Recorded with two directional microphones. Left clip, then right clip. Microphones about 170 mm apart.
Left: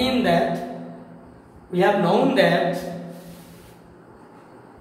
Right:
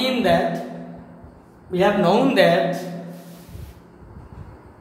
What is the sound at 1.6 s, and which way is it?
Speech, 45° right (ahead or behind).